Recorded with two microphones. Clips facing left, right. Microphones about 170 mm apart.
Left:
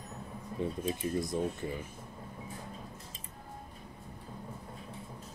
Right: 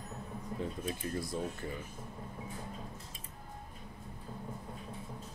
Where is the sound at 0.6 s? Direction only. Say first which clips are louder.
Left 5 dB; 20° left (ahead or behind).